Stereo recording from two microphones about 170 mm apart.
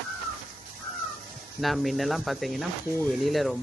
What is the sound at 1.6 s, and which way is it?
Speech, centre (ahead or behind).